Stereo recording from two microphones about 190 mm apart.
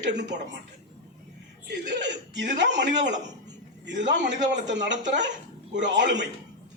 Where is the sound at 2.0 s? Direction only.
65° right (ahead or behind).